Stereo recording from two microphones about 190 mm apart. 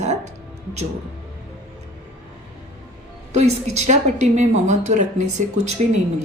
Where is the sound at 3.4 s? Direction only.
35° right (ahead or behind).